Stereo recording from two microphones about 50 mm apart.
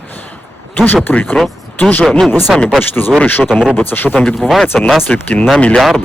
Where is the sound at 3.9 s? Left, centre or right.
Left.